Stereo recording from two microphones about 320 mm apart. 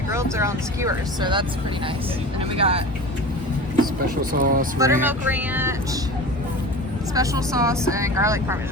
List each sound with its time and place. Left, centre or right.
0.1 s speech: centre
2.6 s speech: centre
4.2 s speech: right
4.8 s speech: centre
7.1 s speech: centre